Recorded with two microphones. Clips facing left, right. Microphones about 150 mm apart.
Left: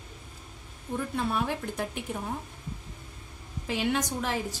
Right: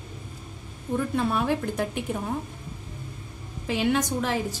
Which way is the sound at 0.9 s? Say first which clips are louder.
Right 5 dB; 90° right.